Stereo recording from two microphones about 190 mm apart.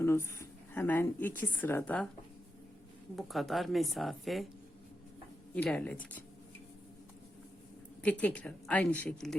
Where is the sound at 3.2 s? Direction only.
Centre (ahead or behind).